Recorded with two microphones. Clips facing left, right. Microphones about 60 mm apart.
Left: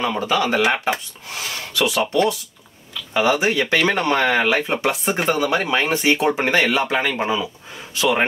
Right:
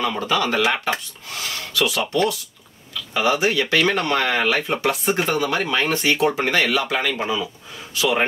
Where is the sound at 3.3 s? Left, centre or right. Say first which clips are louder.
Left 1 dB; left.